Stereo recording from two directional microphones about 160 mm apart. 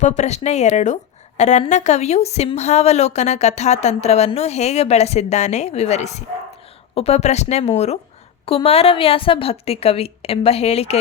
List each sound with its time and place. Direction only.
0.0 s a woman's voice: 45° left (ahead or behind)